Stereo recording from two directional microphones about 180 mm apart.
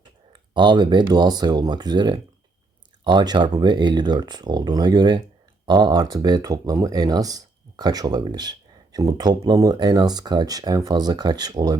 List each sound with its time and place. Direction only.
0.5 s speech: 25° right (ahead or behind)